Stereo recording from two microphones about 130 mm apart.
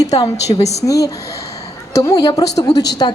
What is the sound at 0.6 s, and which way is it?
Speech, 55° left (ahead or behind).